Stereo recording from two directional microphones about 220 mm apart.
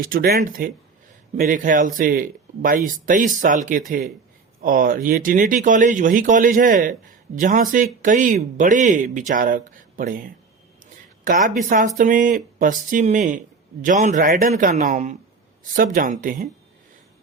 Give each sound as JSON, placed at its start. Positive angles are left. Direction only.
{"t": 0.0, "sound": "speech", "side_deg": -40}
{"t": 11.9, "sound": "speech", "side_deg": -35}